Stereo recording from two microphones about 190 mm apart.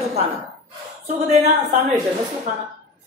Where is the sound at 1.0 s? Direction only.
35° right (ahead or behind).